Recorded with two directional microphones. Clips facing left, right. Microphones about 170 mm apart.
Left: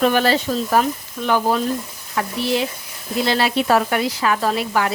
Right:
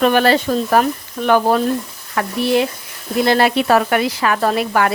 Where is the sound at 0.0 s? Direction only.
60° right (ahead or behind).